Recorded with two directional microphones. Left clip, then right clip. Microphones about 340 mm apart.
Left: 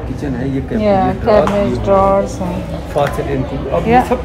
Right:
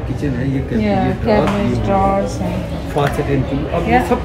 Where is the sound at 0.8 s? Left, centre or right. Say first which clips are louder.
Left 6 dB; centre.